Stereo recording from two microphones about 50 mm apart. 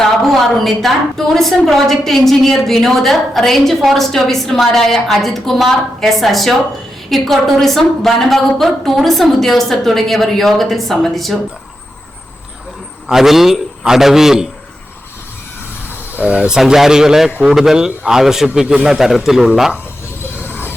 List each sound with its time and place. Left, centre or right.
0.3 s a woman's voice: centre
13.1 s a man's voice: centre
16.1 s speech: right
16.5 s a man's voice: centre